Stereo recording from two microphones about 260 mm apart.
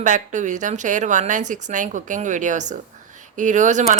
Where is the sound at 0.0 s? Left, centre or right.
Right.